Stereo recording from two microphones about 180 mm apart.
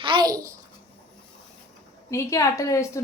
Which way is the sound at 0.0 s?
25° right (ahead or behind).